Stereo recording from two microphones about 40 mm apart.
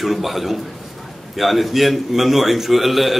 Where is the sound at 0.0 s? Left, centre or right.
Centre.